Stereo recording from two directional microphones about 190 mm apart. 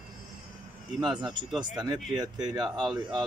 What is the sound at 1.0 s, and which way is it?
Speech, 25° right (ahead or behind).